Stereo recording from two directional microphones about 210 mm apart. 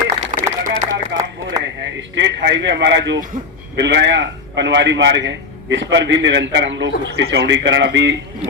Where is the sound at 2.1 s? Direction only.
55° right (ahead or behind).